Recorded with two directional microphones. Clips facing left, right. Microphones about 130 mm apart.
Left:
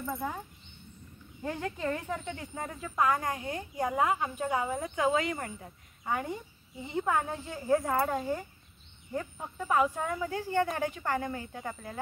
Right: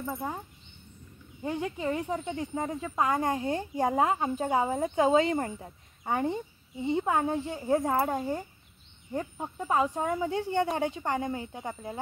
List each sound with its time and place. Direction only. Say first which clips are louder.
1.4 s speech: right 2 dB; 15° right (ahead or behind)